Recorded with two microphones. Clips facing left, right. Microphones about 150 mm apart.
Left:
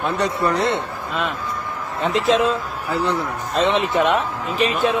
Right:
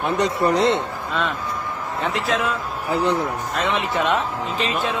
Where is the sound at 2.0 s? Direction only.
20° left (ahead or behind).